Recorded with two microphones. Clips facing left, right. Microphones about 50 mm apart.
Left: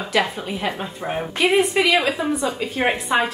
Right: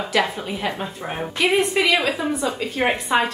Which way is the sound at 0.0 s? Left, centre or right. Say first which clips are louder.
Even; centre.